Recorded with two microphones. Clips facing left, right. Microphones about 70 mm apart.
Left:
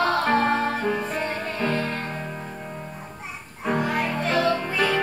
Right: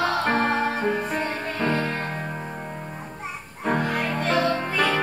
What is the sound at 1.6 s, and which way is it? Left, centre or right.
Music, centre.